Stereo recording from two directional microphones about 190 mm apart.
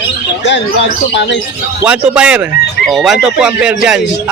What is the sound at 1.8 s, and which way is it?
Speech, 5° right (ahead or behind).